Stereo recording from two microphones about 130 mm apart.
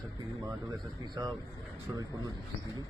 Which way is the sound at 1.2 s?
30° right (ahead or behind).